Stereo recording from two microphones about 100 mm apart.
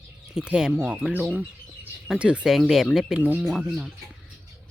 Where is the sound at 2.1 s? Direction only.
10° right (ahead or behind).